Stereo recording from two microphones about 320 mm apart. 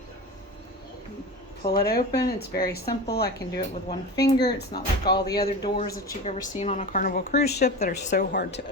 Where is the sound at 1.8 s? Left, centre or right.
Left.